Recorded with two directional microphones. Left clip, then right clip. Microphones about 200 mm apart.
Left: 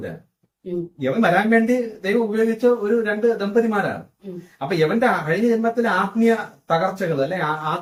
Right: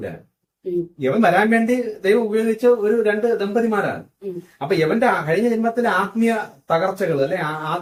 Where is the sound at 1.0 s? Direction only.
15° right (ahead or behind).